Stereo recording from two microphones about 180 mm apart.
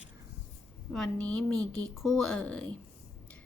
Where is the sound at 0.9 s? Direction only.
5° left (ahead or behind).